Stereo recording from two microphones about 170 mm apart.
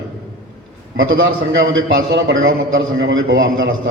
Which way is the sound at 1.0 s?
90° right.